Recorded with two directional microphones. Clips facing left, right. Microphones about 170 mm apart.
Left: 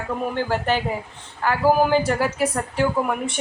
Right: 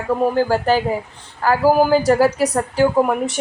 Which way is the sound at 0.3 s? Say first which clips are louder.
Right 6 dB; 40° right (ahead or behind).